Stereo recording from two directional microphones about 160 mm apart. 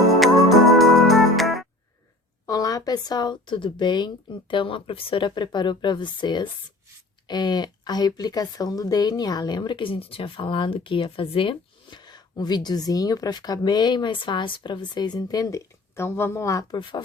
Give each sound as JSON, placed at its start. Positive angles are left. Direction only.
{"t": 0.2, "sound": "music", "side_deg": 0}
{"t": 2.5, "sound": "a woman's voice", "side_deg": 25}